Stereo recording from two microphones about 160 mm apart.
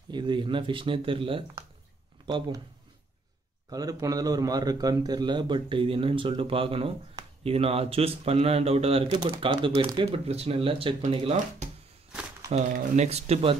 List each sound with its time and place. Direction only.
0.1 s a man's voice: 30° right (ahead or behind)
3.7 s a man's voice: 20° right (ahead or behind); by 13.6 s 40° right (ahead or behind)